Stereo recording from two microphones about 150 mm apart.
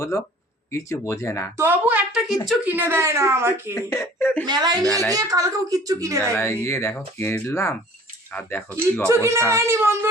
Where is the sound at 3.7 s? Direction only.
20° left (ahead or behind).